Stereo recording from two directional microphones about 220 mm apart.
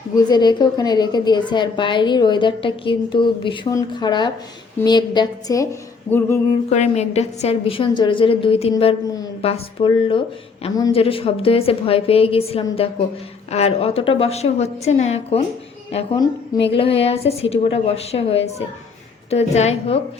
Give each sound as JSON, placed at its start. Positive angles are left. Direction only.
{"t": 0.2, "sound": "a woman's voice", "side_deg": 20}
{"t": 6.1, "sound": "a sound", "side_deg": 10}
{"t": 6.7, "sound": "a woman's voice", "side_deg": 30}